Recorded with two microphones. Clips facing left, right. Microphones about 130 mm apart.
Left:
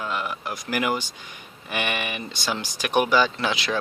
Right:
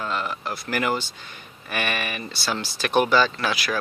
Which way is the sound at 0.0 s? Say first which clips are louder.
Right 1 dB; 10° left (ahead or behind).